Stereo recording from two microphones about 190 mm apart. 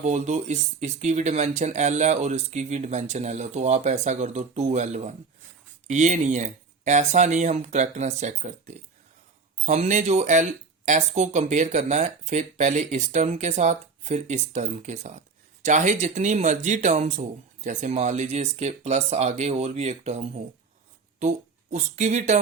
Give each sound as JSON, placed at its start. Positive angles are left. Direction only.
{"t": 0.0, "sound": "speech", "side_deg": -40}